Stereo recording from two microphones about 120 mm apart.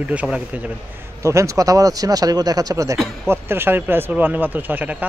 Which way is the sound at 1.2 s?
25° right (ahead or behind).